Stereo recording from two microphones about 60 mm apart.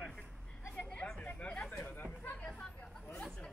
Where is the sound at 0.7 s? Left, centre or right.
Centre.